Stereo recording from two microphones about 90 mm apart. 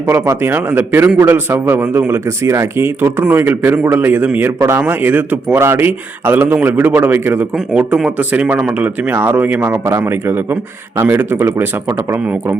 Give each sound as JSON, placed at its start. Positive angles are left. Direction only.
{"t": 0.0, "sound": "a man's voice", "side_deg": -25}